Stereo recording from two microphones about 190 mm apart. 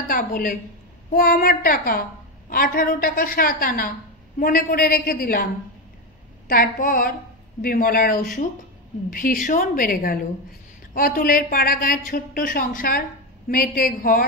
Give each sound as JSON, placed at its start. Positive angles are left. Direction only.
{"t": 0.1, "sound": "a woman's voice", "side_deg": 50}